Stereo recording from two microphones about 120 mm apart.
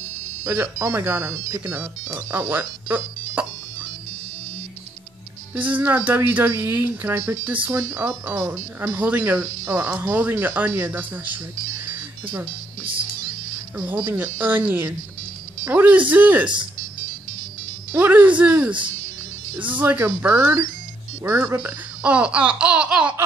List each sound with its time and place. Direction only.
0.4 s speech: 20° right (ahead or behind)
5.5 s speech: 15° right (ahead or behind)
13.7 s speech: 15° right (ahead or behind)
17.9 s speech: 15° right (ahead or behind)